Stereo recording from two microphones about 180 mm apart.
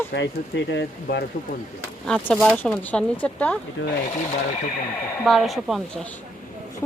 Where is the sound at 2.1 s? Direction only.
5° left (ahead or behind).